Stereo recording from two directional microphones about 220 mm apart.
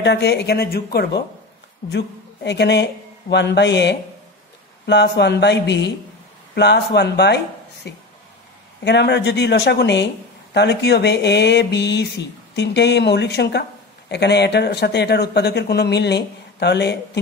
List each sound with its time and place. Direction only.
0.0 s speech: 50° left (ahead or behind)